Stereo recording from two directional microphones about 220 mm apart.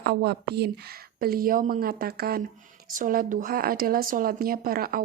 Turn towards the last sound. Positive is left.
turn(degrees=-40)  # may be behind; listen again after turning